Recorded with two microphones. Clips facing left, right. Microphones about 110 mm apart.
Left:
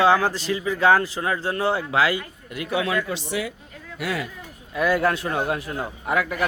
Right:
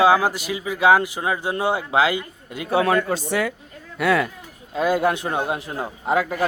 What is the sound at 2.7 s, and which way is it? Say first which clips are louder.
Child singing: right 5 dB; 45° right (ahead or behind).